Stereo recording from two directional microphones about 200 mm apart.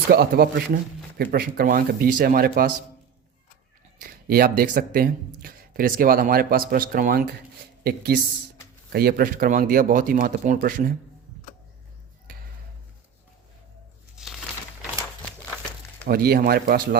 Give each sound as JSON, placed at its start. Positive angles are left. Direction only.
{"t": 0.1, "sound": "speech", "side_deg": -50}
{"t": 4.0, "sound": "speech", "side_deg": -50}
{"t": 14.2, "sound": "a sound", "side_deg": -5}
{"t": 16.0, "sound": "speech", "side_deg": -50}